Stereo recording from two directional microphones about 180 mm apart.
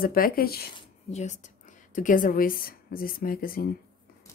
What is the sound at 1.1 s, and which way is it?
Speech, 35° left (ahead or behind).